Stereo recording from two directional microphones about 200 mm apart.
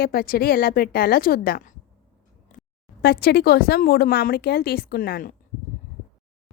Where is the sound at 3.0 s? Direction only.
55° left (ahead or behind).